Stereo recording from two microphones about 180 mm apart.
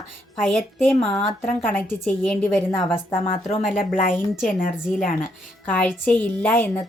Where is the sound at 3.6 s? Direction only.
50° left (ahead or behind).